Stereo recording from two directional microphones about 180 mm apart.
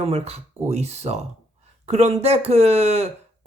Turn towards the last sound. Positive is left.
turn(degrees=-35)  # may be behind; listen again after turning